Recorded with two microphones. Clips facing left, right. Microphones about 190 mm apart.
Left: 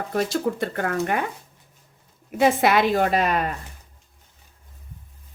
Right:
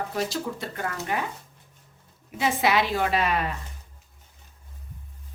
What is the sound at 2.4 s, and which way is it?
A woman's voice, 55° left (ahead or behind).